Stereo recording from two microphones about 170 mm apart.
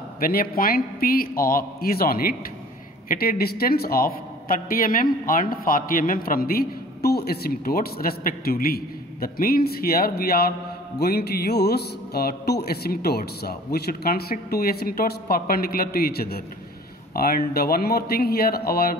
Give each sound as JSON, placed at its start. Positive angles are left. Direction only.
{"t": 0.2, "sound": "a man's voice", "side_deg": 60}